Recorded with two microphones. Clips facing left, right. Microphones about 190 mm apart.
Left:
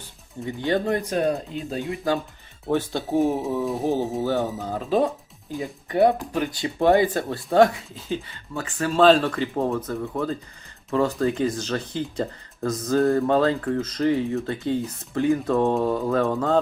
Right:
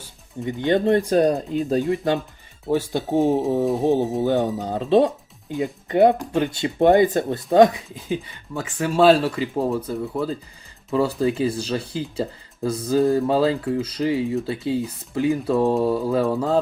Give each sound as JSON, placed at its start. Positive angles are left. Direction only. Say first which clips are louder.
{"t": 0.4, "sound": "speech", "louder": "right 4 dB", "side_deg": -20}
{"t": 2.6, "sound": "speech", "louder": "right 2 dB", "side_deg": -10}
{"t": 3.1, "sound": "speech", "louder": "right 3 dB", "side_deg": -30}